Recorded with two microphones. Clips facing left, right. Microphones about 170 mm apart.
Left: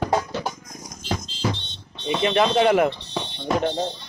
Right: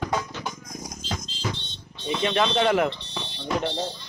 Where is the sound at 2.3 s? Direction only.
15° left (ahead or behind).